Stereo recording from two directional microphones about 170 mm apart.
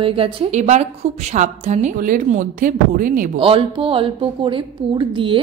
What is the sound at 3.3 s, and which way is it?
Speech, 30° right (ahead or behind).